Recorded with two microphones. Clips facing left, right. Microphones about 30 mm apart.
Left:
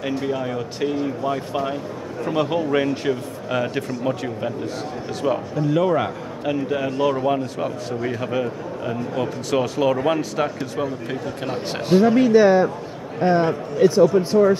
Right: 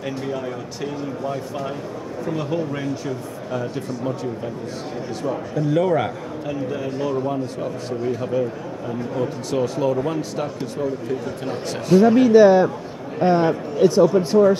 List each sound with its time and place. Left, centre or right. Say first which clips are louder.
0.1 s speech: left 4 dB; centre
2.5 s speech: left 4 dB; left
3.4 s speech: left 4 dB; left
5.6 s a man's voice: right 1 dB; centre
6.4 s speech: left 4 dB; left
8.0 s a man's voice: right 2 dB; left
11.6 s speech: right 2 dB; left
12.2 s a man's voice: right 3 dB; centre